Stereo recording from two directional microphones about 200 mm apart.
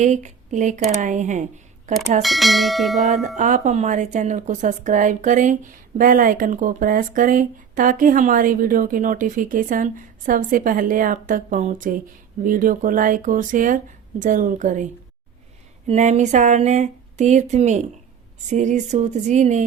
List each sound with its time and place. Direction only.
0.0 s a woman's voice: 35° right (ahead or behind)
2.2 s bell: centre (ahead or behind)
3.3 s a woman's voice: 40° right (ahead or behind)
15.9 s a woman's voice: 35° right (ahead or behind)